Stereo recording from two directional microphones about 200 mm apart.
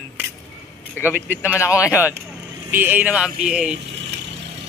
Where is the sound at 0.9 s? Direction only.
10° left (ahead or behind).